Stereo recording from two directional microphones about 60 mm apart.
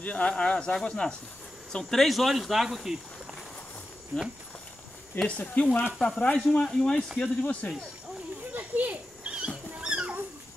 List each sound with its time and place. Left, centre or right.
0.0 s speech: left
2.0 s speech: centre
5.2 s speech: left
5.6 s speech: left
8.5 s a sound: right
9.2 s rodents: centre
9.8 s a sound: centre